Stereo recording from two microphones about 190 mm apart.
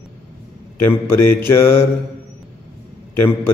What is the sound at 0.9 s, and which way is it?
Mantra, 10° left (ahead or behind).